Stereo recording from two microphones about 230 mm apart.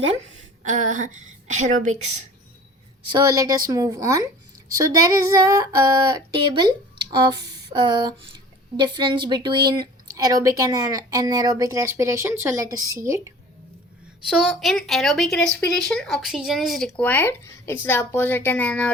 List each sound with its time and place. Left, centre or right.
0.6 s a woman's voice: right
3.1 s a woman's voice: centre
14.3 s a woman's voice: centre